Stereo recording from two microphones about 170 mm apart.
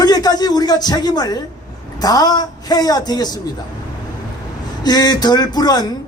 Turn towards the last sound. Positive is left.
turn(degrees=25)  # may be behind; listen again after turning